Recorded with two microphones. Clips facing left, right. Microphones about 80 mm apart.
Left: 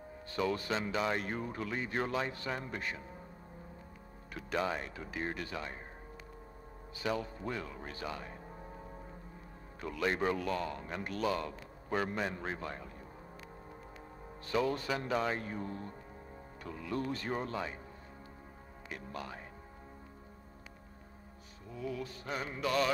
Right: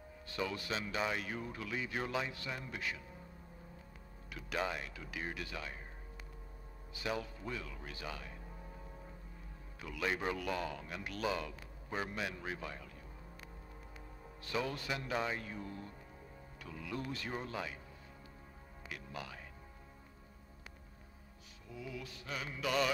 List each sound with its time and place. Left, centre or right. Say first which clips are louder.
0.3 s a man's voice: left 5 dB; left
4.5 s a man's voice: left 4 dB; left
7.2 s a man's voice: left 4 dB; left
9.8 s a man's voice: left 5 dB; left
14.4 s a man's voice: left 6 dB; left
18.9 s speech: left 3 dB; left
21.7 s a man's voice: left 6 dB; left